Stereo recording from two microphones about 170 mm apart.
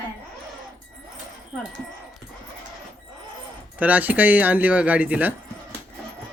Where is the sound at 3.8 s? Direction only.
10° right (ahead or behind).